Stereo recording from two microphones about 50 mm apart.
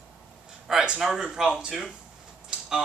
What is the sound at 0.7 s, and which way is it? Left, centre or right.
Speech, centre.